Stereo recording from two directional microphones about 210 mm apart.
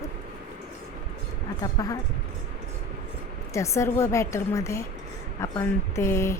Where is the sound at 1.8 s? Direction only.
15° left (ahead or behind).